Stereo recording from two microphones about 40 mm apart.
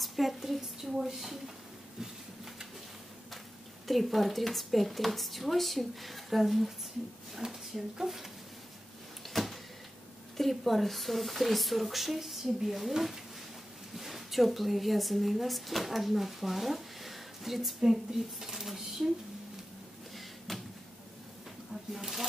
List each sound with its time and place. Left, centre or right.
0.0 s a woman's voice: centre
3.8 s a woman's voice: centre
7.4 s speech: right
8.0 s speech: centre
9.3 s power windows: centre
10.3 s a woman's voice: centre
20.2 s a sound: centre
21.9 s speech: centre